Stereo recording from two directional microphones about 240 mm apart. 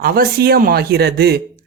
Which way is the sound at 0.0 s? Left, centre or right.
Right.